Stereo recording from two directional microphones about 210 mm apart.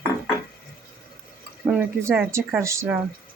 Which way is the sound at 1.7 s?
10° right (ahead or behind).